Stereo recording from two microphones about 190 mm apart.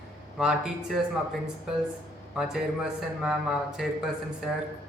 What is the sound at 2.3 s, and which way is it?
Speech, 5° right (ahead or behind).